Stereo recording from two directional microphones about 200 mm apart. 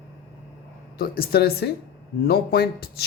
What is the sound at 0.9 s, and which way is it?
Speech, 50° left (ahead or behind).